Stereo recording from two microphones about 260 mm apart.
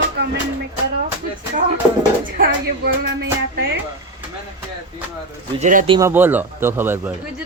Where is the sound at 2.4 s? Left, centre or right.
Right.